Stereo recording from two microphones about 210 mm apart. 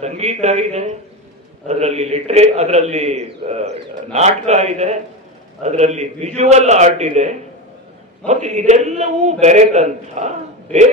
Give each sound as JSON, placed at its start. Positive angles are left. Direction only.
{"t": 0.0, "sound": "a man's voice", "side_deg": -30}